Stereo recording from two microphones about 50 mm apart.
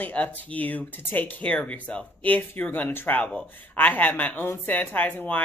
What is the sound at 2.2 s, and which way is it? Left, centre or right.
Speech, left.